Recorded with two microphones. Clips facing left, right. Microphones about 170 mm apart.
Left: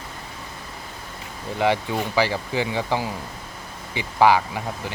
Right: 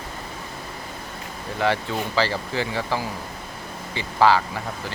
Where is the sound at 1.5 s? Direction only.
15° left (ahead or behind).